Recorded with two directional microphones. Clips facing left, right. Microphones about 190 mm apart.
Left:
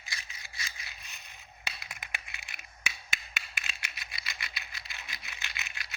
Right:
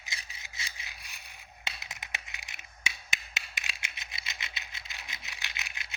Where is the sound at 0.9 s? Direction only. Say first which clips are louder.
Even; 10° right (ahead or behind).